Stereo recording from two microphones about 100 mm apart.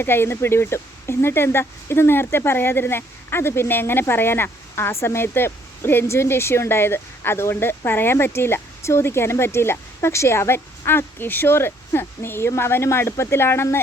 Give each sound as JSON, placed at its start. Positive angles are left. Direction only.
{"t": 0.0, "sound": "speech", "side_deg": 25}